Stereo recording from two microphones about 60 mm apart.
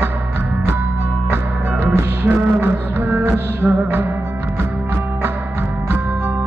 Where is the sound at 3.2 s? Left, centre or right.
Right.